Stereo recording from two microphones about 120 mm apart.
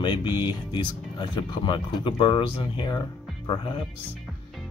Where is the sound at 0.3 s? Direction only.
20° right (ahead or behind).